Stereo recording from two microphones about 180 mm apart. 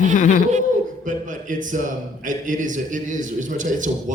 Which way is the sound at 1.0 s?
45° right (ahead or behind).